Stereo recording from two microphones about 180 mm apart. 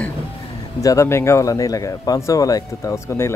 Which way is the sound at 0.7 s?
15° left (ahead or behind).